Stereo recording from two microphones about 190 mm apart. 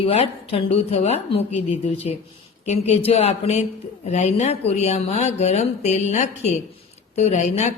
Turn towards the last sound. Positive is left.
turn(degrees=40)  # may be behind; listen again after turning